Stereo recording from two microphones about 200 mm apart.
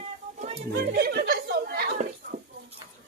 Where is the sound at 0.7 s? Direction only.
50° right (ahead or behind).